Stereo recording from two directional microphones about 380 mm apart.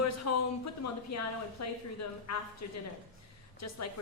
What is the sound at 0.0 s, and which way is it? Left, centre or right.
A woman's voice, left.